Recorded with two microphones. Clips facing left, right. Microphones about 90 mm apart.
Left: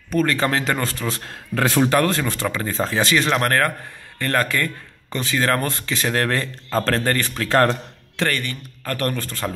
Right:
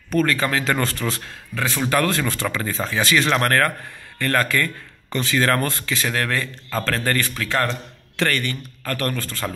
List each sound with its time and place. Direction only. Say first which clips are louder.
0.3 s speech: left 1 dB; 30° left (ahead or behind)
0.7 s a man's voice: right 1 dB; 15° left (ahead or behind)
1.2 s speech: left 4 dB; 50° left (ahead or behind)
1.9 s speech: left 1 dB; 25° left (ahead or behind)
2.7 s speech: left 1 dB; 30° left (ahead or behind)
7.4 s speech: left 7 dB; 45° left (ahead or behind)
8.2 s speech: right 1 dB; 20° left (ahead or behind)